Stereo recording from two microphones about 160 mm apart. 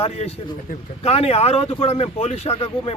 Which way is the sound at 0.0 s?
40° left (ahead or behind).